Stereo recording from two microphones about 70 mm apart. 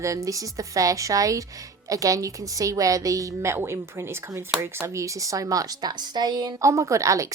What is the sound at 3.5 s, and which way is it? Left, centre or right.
A woman's voice, right.